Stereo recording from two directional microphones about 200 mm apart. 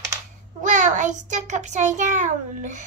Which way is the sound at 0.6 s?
40° right (ahead or behind).